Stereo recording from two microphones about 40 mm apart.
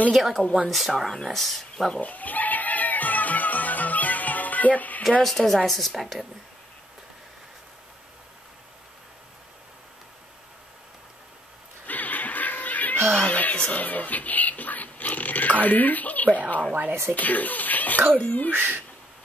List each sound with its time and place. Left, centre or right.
0.1 s speech: centre
2.0 s music: left
5.2 s a woman's voice: centre
11.8 s music: left
13.6 s speech: left
18.5 s speech: right